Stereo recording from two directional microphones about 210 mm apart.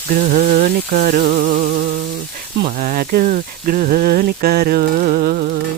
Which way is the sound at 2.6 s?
40° right (ahead or behind).